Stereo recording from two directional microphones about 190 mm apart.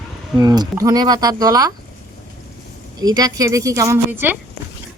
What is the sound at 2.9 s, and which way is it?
A woman's voice, 20° right (ahead or behind).